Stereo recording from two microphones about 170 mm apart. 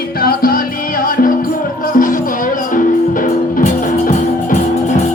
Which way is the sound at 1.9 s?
50° left (ahead or behind).